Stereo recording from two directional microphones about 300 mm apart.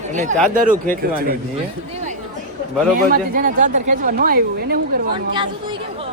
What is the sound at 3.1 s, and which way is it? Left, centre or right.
A woman's voice, right.